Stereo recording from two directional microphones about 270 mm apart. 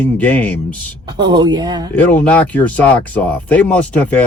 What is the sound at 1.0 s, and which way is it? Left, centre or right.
Speech, centre.